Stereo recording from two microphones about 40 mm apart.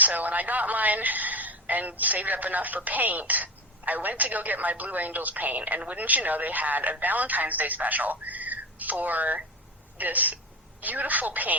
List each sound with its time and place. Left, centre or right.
0.0 s a woman's voice: right